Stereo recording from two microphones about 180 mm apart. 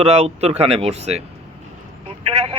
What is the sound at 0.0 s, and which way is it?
A man's voice, 35° right (ahead or behind).